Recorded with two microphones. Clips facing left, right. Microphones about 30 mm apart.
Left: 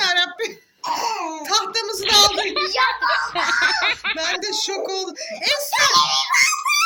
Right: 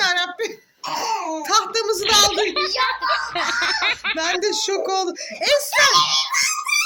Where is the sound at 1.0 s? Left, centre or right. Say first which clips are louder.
Right 1 dB; left.